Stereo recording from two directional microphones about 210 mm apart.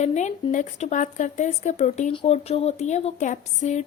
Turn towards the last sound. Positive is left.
turn(degrees=35)  # may be behind; listen again after turning